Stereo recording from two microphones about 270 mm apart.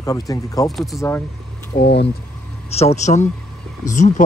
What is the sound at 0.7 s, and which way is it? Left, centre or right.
Speech, centre.